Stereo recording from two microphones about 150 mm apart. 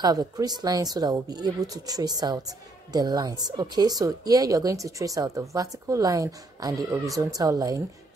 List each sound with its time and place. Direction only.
0.0 s a woman's voice: 25° right (ahead or behind)